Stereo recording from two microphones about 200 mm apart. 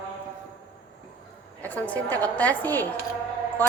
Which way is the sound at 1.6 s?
10° left (ahead or behind).